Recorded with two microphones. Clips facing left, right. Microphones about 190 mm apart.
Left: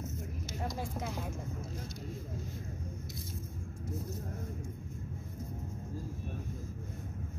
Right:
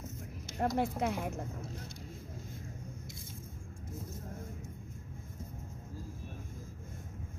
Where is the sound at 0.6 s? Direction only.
65° right (ahead or behind).